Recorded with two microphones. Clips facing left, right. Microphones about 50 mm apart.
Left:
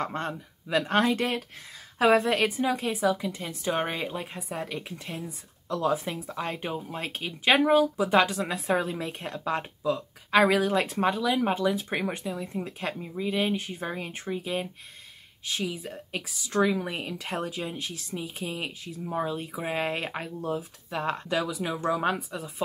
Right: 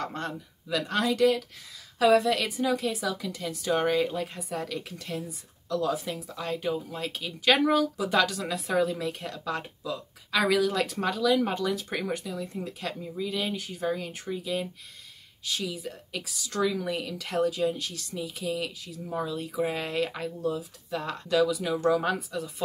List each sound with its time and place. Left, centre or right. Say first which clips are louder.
0.0 s a woman's voice: left 2 dB; left